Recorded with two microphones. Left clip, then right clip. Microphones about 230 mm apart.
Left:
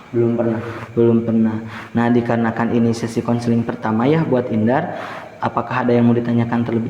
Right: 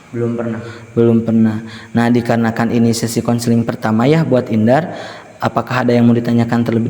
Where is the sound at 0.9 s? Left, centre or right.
Right.